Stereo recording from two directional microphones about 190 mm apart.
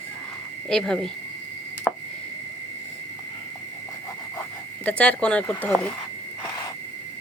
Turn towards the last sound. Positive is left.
turn(degrees=5)  # may be behind; listen again after turning